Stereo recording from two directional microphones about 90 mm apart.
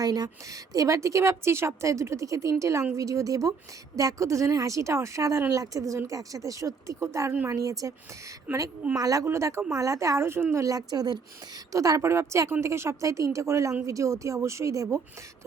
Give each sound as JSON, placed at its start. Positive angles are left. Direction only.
{"t": 0.0, "sound": "a woman's voice", "side_deg": -45}
{"t": 9.0, "sound": "a woman's voice", "side_deg": -40}